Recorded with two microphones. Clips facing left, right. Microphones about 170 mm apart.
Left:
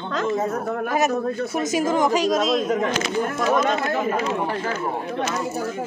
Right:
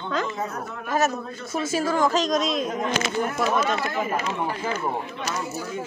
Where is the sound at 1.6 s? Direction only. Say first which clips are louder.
Left 1 dB; 20° left (ahead or behind); by 2.6 s 5° left (ahead or behind).